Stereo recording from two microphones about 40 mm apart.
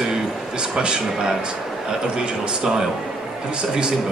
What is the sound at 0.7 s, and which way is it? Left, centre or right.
Speech, centre.